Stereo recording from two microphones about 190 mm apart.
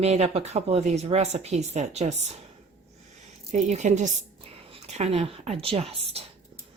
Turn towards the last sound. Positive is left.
turn(degrees=-30)  # may be behind; listen again after turning